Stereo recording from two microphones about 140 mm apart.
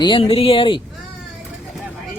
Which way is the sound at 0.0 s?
40° left (ahead or behind).